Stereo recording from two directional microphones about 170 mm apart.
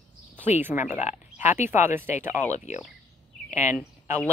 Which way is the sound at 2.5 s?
45° left (ahead or behind).